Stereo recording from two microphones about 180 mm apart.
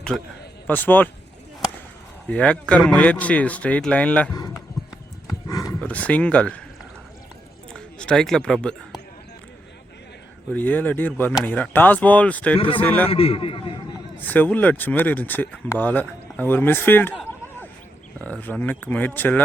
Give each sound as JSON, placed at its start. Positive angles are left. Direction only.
{"t": 0.1, "sound": "a man's voice", "side_deg": 0}
{"t": 2.2, "sound": "speech", "side_deg": 5}
{"t": 5.5, "sound": "dog", "side_deg": 20}
{"t": 5.8, "sound": "speech", "side_deg": 10}
{"t": 7.7, "sound": "a sound", "side_deg": 5}
{"t": 10.5, "sound": "speech", "side_deg": 10}
{"t": 12.5, "sound": "speech", "side_deg": 30}
{"t": 12.8, "sound": "speech", "side_deg": 10}
{"t": 13.1, "sound": "a man's voice", "side_deg": 30}
{"t": 14.2, "sound": "speech", "side_deg": 10}
{"t": 18.2, "sound": "speech", "side_deg": 10}